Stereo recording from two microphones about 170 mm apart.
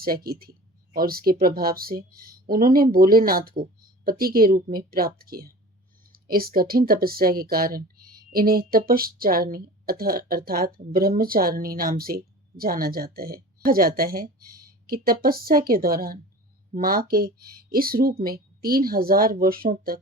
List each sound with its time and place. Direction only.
0.0 s a woman's voice: 60° right (ahead or behind)